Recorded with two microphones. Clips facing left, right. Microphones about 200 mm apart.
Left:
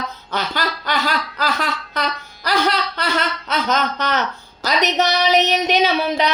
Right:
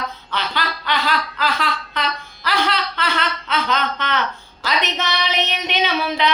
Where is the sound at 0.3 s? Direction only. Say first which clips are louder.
Left 3 dB; 45° left (ahead or behind).